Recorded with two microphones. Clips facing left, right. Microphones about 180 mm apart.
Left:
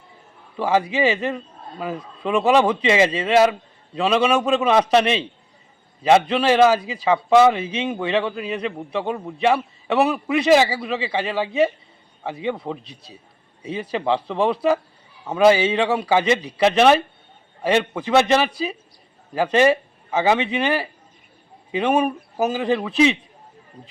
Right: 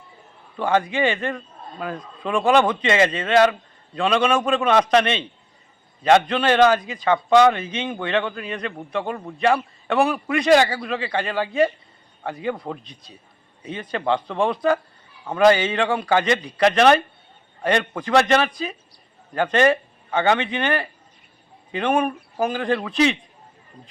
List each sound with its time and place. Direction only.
0.5 s a man's voice: 5° left (ahead or behind)
12.8 s a man's voice: 30° left (ahead or behind)
13.6 s a man's voice: 10° left (ahead or behind)